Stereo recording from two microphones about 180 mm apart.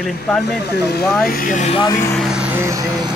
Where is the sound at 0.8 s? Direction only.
65° left (ahead or behind).